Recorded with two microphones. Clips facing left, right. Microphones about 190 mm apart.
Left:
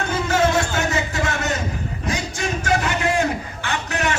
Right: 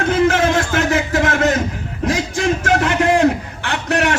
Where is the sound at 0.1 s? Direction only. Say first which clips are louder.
Right 4 dB; 90° right.